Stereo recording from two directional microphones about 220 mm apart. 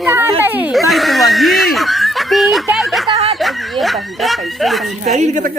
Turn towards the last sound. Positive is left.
turn(degrees=-35)  # may be behind; listen again after turning